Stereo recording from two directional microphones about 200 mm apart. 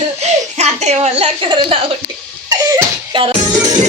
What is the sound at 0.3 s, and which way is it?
Speech, 35° right (ahead or behind).